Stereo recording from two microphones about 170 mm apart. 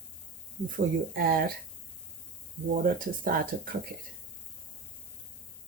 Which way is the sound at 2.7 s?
55° right (ahead or behind).